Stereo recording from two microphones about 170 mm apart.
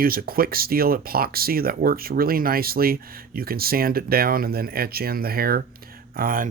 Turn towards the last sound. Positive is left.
turn(degrees=-55)  # may be behind; listen again after turning